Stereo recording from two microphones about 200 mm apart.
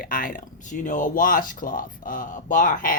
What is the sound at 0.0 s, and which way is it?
Speech, 45° left (ahead or behind).